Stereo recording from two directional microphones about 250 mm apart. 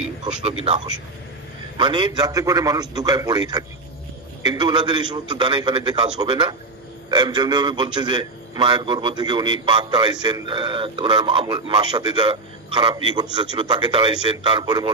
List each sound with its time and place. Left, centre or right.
0.4 s a man's voice: right